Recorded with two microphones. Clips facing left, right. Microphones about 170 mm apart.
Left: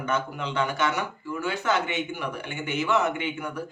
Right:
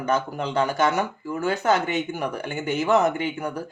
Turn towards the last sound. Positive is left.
turn(degrees=-40)  # may be behind; listen again after turning